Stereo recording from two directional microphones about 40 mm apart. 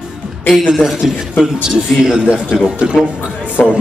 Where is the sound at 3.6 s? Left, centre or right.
Left.